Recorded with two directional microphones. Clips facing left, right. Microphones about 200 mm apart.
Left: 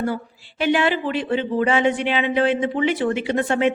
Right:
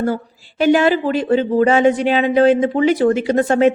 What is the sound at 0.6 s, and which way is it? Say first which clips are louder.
A woman's voice: right 6 dB; 40° right (ahead or behind).